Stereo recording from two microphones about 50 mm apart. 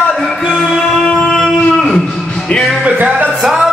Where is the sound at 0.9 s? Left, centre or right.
Centre.